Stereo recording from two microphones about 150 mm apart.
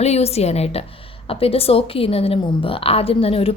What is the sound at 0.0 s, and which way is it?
A woman's voice, 45° left (ahead or behind).